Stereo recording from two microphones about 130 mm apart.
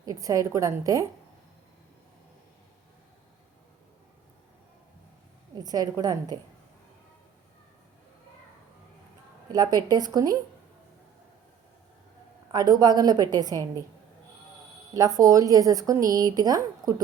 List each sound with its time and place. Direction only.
0.0 s a woman's voice: 25° right (ahead or behind)
5.5 s a woman's voice: 30° right (ahead or behind)
9.5 s speech: 30° right (ahead or behind)
12.5 s a woman's voice: 30° right (ahead or behind)
14.9 s a woman's voice: 25° right (ahead or behind)